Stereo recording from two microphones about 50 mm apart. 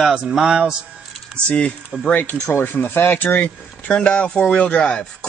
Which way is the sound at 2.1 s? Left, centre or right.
Left.